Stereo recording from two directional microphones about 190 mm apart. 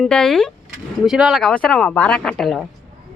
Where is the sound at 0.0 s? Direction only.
Centre (ahead or behind).